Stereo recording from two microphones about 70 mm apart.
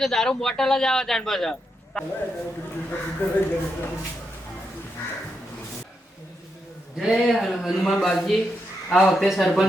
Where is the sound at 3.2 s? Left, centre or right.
Left.